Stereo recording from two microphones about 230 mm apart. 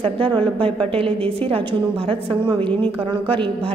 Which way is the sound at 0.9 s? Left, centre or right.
Right.